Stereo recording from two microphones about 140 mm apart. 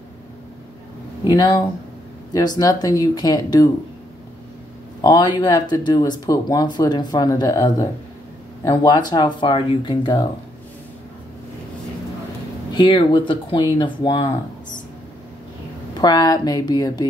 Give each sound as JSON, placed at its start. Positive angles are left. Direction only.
{"t": 1.3, "sound": "speech", "side_deg": 25}
{"t": 5.0, "sound": "speech", "side_deg": 30}
{"t": 12.7, "sound": "speech", "side_deg": 35}
{"t": 16.0, "sound": "speech", "side_deg": 30}